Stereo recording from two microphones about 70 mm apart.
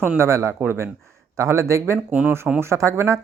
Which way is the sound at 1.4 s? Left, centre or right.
Right.